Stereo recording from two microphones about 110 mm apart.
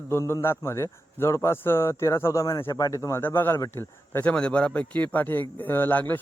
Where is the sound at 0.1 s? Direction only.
25° left (ahead or behind).